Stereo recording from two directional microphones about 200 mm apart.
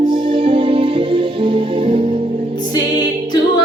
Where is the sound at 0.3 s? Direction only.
25° right (ahead or behind).